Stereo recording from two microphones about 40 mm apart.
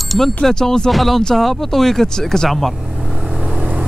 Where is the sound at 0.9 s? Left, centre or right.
Centre.